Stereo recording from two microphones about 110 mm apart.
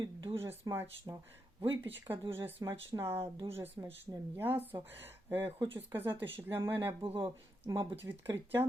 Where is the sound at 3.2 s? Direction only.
55° right (ahead or behind).